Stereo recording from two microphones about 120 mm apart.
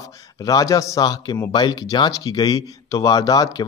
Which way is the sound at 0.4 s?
30° left (ahead or behind).